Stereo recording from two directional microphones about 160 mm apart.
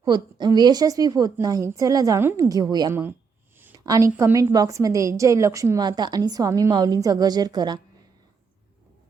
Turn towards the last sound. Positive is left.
turn(degrees=-25)  # may be behind; listen again after turning